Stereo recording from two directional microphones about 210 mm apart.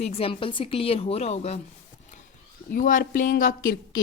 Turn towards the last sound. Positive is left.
turn(degrees=40)  # may be behind; listen again after turning